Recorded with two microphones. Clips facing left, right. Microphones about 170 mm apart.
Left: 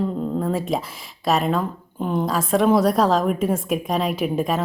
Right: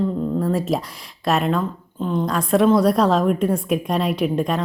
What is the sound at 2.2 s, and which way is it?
A woman's voice, centre (ahead or behind).